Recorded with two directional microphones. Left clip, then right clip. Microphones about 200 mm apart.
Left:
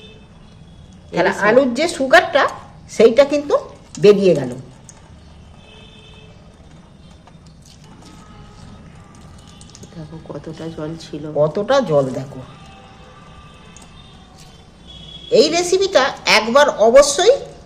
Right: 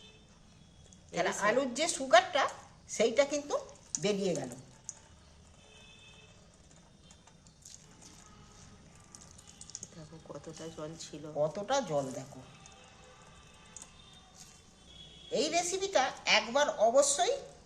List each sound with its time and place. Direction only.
1.1 s a woman's voice: 25° left (ahead or behind)
10.2 s speech: centre (ahead or behind)
11.3 s a woman's voice: 25° left (ahead or behind)
15.3 s a woman's voice: 30° left (ahead or behind)